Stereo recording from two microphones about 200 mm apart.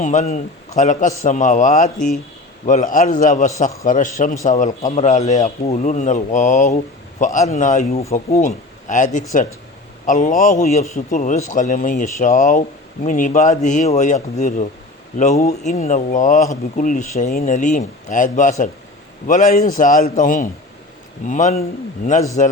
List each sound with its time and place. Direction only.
0.0 s a man's voice: 35° left (ahead or behind)
10.1 s a man's voice: 40° left (ahead or behind)